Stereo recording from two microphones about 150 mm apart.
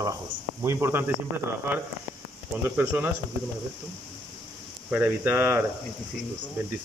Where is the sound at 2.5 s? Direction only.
10° right (ahead or behind).